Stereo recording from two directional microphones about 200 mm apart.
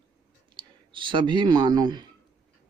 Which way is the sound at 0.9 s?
25° right (ahead or behind).